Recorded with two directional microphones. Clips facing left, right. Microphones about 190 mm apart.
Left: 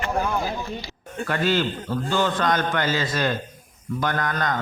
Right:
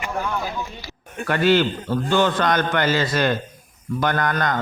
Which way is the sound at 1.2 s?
70° right (ahead or behind).